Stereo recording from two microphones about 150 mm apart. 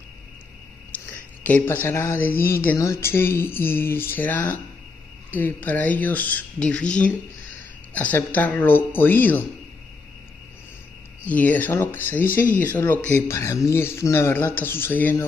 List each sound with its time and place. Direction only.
1.1 s speech: 10° left (ahead or behind)
11.2 s speech: 10° left (ahead or behind)